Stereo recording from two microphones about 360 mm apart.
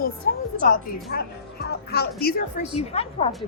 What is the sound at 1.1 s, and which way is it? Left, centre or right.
A woman's voice, left.